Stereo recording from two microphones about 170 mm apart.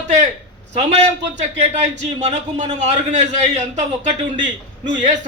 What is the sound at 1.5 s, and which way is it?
A man's voice, 40° right (ahead or behind).